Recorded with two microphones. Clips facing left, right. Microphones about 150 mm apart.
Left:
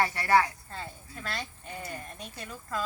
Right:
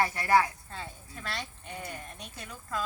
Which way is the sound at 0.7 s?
Centre (ahead or behind).